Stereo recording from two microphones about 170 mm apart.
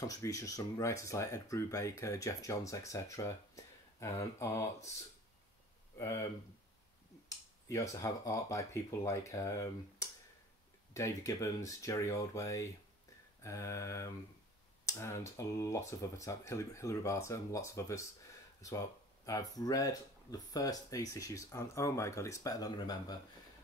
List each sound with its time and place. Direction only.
0.0 s speech: 20° left (ahead or behind)
5.9 s speech: 20° left (ahead or behind)